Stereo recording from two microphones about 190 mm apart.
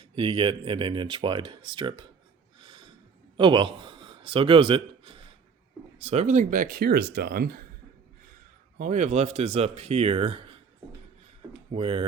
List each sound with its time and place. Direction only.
0.2 s speech: 25° right (ahead or behind)
2.6 s a sound: 25° right (ahead or behind)
3.3 s a man's voice: 25° right (ahead or behind); by 7.6 s 55° right (ahead or behind)
8.8 s speech: 40° right (ahead or behind)
11.7 s speech: 30° right (ahead or behind)